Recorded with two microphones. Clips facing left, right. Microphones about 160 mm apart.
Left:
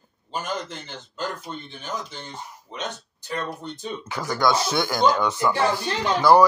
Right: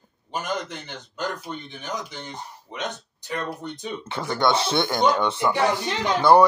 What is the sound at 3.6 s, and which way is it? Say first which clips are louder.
Speech: even; 20° right (ahead or behind).